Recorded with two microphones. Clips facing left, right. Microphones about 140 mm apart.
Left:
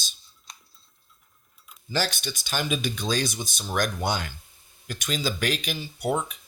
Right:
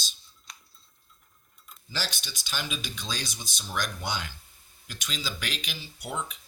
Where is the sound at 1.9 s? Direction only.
50° left (ahead or behind).